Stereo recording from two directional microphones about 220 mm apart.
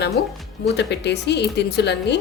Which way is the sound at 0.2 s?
45° left (ahead or behind).